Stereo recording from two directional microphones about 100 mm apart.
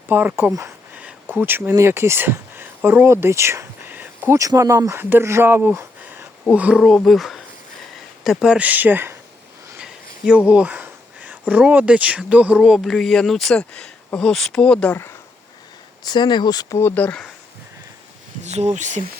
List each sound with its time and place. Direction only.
0.1 s speech: 20° right (ahead or behind)
0.9 s a sound: 15° right (ahead or behind)
1.7 s speech: 25° right (ahead or behind)
3.9 s a sound: 20° right (ahead or behind)
4.4 s speech: 30° right (ahead or behind); by 6.7 s 10° right (ahead or behind)
6.7 s speech: centre (ahead or behind); by 9.1 s 20° right (ahead or behind)
9.7 s speech: 10° right (ahead or behind); by 14.9 s 10° left (ahead or behind)
16.0 s speech: 50° left (ahead or behind)
16.7 s speech: 20° left (ahead or behind)